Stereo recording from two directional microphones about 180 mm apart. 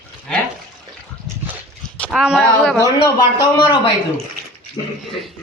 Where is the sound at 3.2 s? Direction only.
25° left (ahead or behind).